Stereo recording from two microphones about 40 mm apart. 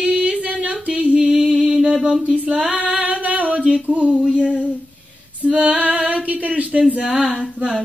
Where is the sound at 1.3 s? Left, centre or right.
Right.